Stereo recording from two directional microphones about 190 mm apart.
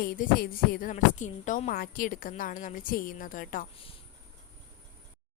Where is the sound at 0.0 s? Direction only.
50° left (ahead or behind).